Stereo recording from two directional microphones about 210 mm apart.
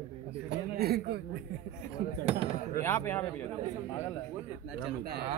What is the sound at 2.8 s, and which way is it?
Speech, 10° left (ahead or behind).